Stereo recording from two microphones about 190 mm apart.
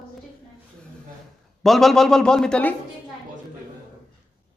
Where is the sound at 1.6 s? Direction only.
Centre (ahead or behind).